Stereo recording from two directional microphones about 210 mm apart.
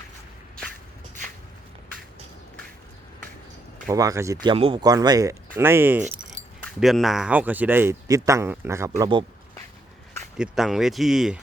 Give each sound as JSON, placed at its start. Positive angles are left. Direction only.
{"t": 3.8, "sound": "speech", "side_deg": -15}
{"t": 4.5, "sound": "speech", "side_deg": -25}
{"t": 10.3, "sound": "speech", "side_deg": -5}